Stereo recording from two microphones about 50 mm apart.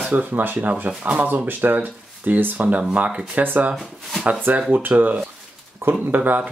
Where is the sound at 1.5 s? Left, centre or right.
Right.